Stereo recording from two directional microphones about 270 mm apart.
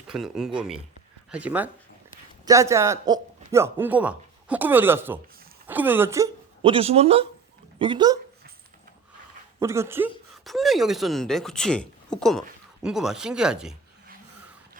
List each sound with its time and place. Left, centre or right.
0.1 s a man's voice: centre
9.6 s speech: centre